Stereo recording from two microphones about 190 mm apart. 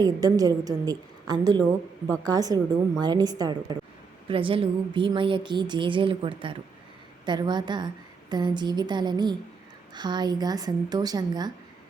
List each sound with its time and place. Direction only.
0.0 s speech: 20° right (ahead or behind)